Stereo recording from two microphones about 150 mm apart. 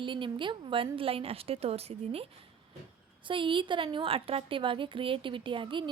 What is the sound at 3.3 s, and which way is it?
Speech, 35° right (ahead or behind).